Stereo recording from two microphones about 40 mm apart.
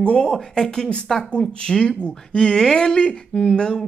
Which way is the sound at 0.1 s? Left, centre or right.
Centre.